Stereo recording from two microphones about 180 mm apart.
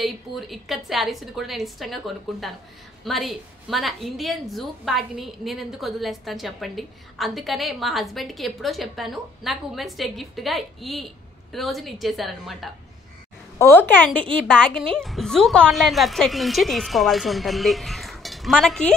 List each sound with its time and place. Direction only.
0.0 s a woman's voice: centre (ahead or behind)
13.6 s a woman's voice: 10° left (ahead or behind)